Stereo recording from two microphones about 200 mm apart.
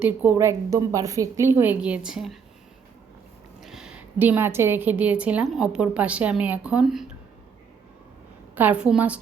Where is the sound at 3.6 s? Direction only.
Centre (ahead or behind).